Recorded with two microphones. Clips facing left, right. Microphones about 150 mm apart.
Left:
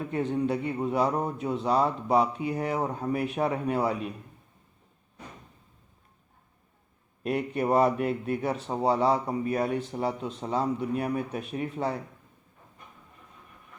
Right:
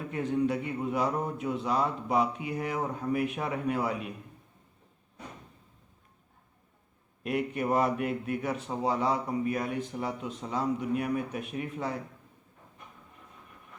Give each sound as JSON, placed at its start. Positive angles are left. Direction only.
{"t": 0.1, "sound": "speech", "side_deg": 30}
{"t": 7.2, "sound": "speech", "side_deg": 35}